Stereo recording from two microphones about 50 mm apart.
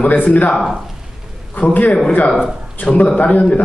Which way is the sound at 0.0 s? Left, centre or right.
Left.